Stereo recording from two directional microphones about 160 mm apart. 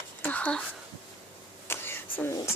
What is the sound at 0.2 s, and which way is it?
Whispering, 10° left (ahead or behind).